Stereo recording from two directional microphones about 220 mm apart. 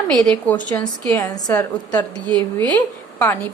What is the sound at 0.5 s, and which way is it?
A woman's voice, 5° left (ahead or behind).